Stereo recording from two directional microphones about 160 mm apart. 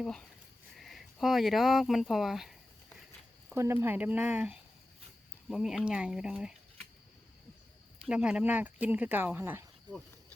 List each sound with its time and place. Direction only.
0.0 s speech: 5° left (ahead or behind)
3.5 s speech: 15° right (ahead or behind)
7.9 s speech: 5° right (ahead or behind)
9.9 s speech: 25° right (ahead or behind)